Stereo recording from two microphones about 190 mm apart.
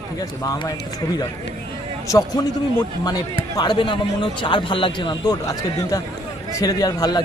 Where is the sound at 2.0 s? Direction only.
20° left (ahead or behind).